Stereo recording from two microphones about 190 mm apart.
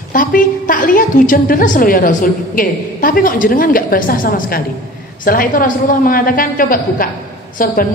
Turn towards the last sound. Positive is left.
turn(degrees=45)  # may be behind; listen again after turning